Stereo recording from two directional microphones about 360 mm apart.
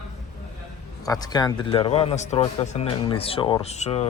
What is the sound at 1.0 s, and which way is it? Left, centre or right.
Speech, centre.